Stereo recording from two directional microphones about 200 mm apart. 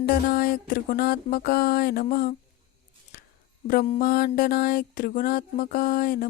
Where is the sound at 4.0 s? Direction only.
50° left (ahead or behind).